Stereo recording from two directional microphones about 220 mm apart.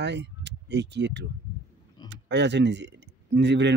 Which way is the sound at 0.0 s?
50° right (ahead or behind).